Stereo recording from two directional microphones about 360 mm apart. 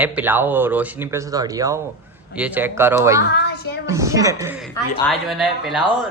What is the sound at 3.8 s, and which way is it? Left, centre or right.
Speech, centre.